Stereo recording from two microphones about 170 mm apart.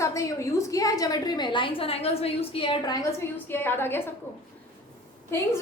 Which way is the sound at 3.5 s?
15° left (ahead or behind).